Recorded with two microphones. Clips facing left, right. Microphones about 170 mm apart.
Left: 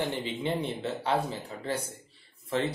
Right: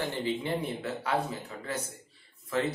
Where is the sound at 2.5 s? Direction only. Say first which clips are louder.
Left 1 dB; 30° left (ahead or behind).